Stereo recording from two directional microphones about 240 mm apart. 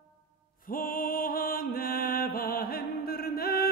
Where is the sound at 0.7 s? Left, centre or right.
Left.